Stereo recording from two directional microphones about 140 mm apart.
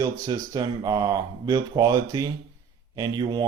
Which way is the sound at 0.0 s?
25° right (ahead or behind).